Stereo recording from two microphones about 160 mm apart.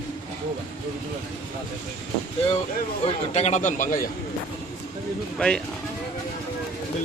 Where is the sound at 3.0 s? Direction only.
45° left (ahead or behind).